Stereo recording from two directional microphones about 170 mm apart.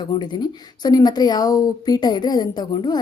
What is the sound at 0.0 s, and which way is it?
A woman's voice, 25° left (ahead or behind).